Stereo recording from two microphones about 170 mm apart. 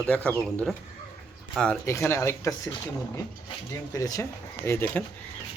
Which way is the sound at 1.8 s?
15° left (ahead or behind).